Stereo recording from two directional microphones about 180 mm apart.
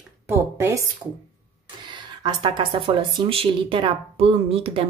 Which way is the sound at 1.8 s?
25° right (ahead or behind).